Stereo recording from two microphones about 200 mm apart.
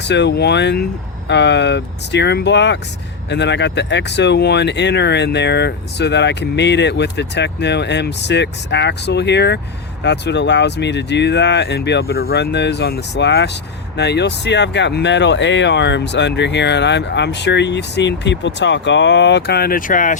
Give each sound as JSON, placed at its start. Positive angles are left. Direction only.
{"t": 0.0, "sound": "speech", "side_deg": 60}